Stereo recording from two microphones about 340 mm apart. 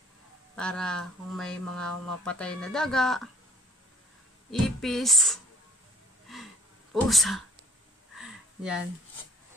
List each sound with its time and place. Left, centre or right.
0.6 s speech: centre
4.5 s speech: centre
6.2 s a sound: centre